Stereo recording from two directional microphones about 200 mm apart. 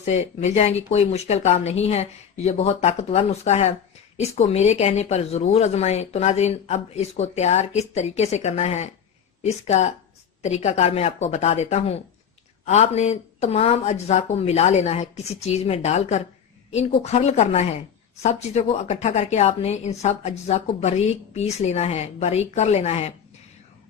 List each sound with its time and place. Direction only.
0.0 s a woman's voice: 35° left (ahead or behind)